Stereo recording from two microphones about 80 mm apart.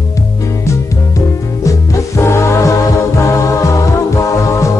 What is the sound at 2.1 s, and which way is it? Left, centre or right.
Music, left.